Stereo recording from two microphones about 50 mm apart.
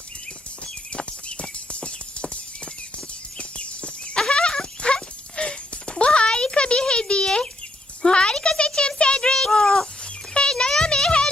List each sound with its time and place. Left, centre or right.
0.9 s music: left
3.3 s horse: left
4.2 s a sound: centre
10.3 s music: centre